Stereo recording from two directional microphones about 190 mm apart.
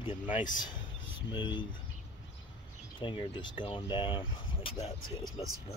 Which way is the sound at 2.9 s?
25° left (ahead or behind).